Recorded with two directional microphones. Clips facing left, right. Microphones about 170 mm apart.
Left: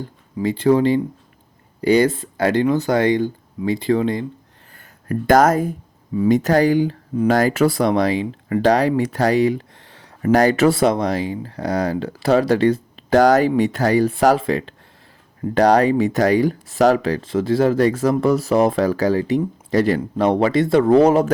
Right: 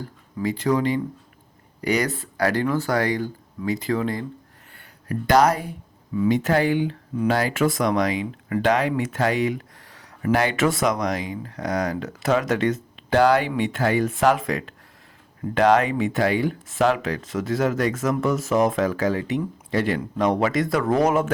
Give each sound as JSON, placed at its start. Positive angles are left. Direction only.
{"t": 0.0, "sound": "speech", "side_deg": 25}
{"t": 4.8, "sound": "speech", "side_deg": 50}
{"t": 10.3, "sound": "speech", "side_deg": 40}